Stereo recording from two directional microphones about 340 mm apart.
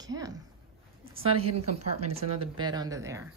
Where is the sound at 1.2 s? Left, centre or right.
Right.